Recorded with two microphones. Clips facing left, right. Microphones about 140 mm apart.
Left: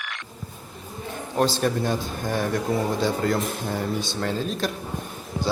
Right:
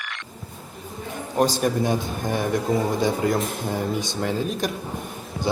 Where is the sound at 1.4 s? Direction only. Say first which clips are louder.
Right 2 dB; 15° right (ahead or behind).